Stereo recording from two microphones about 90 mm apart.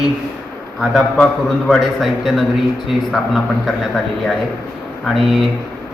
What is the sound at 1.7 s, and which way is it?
Speech, centre (ahead or behind).